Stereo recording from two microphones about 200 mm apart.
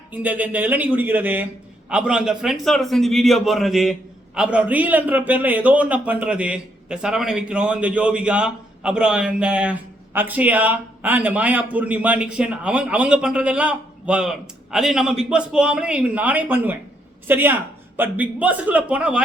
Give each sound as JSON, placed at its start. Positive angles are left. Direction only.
{"t": 0.1, "sound": "a man's voice", "side_deg": -10}